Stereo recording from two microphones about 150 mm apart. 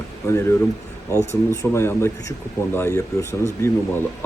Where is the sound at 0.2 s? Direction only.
20° left (ahead or behind).